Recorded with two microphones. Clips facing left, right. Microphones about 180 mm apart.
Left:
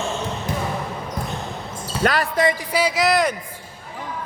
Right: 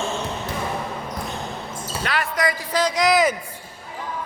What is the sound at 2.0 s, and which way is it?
Speech, 40° left (ahead or behind).